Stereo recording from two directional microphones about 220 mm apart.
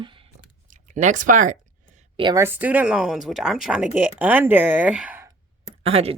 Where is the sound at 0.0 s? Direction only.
25° right (ahead or behind).